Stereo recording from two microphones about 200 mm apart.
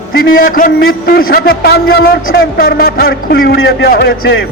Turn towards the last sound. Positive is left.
turn(degrees=50)  # may be behind; listen again after turning